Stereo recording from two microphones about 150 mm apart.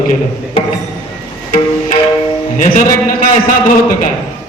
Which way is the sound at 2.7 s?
60° left (ahead or behind).